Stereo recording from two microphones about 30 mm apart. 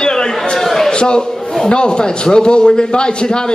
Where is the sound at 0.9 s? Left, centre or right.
Left.